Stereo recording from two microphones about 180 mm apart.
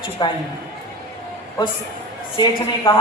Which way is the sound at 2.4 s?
30° left (ahead or behind).